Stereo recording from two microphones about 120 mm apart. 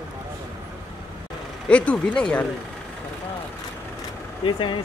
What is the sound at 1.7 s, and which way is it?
Speech, 10° left (ahead or behind).